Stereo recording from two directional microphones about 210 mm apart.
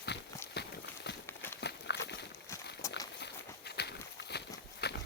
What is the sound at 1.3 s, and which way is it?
Horse, 10° left (ahead or behind).